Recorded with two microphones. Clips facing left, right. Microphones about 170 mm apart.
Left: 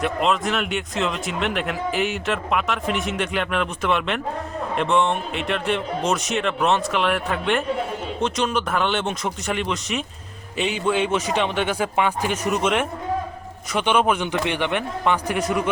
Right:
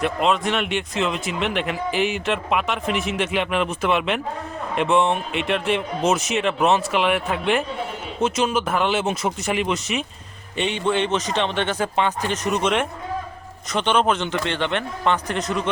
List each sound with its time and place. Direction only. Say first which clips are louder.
0.0 s a man's voice: right 1 dB; centre (ahead or behind)